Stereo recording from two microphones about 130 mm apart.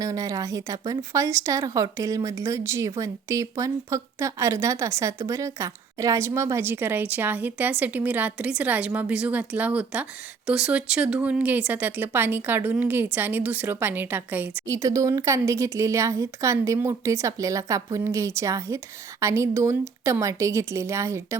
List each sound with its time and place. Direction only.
0.0 s a woman's voice: 25° right (ahead or behind)